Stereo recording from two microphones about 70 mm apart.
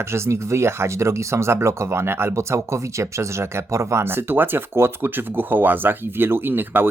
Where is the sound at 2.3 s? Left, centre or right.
Right.